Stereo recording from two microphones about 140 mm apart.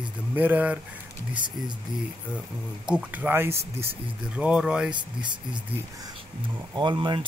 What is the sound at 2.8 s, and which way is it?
Speech, 10° right (ahead or behind).